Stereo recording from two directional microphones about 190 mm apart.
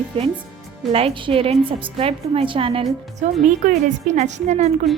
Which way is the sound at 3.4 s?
40° right (ahead or behind).